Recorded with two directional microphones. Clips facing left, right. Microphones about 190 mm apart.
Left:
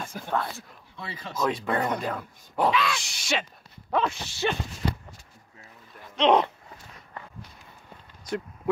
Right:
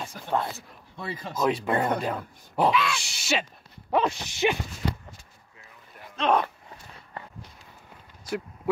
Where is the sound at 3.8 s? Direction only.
15° right (ahead or behind).